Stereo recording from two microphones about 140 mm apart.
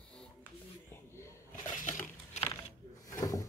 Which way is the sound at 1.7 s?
65° left (ahead or behind).